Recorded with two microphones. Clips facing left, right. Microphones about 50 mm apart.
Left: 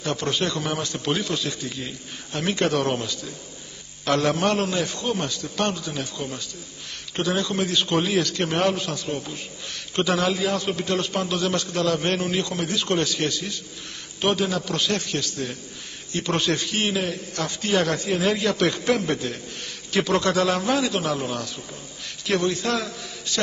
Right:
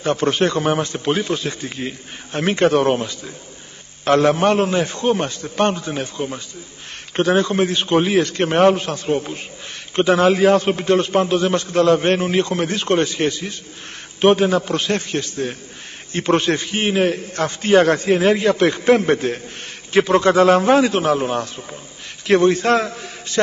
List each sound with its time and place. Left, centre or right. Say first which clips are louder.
0.0 s a man's voice: right 7 dB; right
17.0 s a man's voice: right 9 dB; right